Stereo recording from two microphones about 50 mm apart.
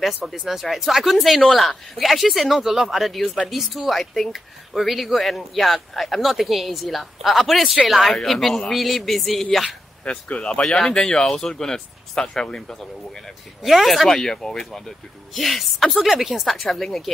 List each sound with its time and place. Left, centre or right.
0.0 s speech: centre
10.0 s speech: left
13.6 s speech: centre
14.0 s speech: centre